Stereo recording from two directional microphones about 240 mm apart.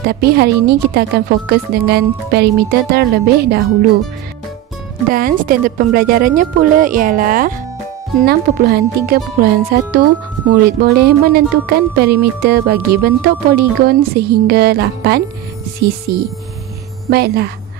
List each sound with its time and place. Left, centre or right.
0.0 s speech: right
5.1 s speech: right
17.1 s speech: right